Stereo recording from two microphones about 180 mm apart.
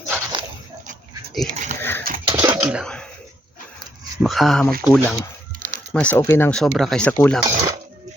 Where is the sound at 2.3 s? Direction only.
25° right (ahead or behind).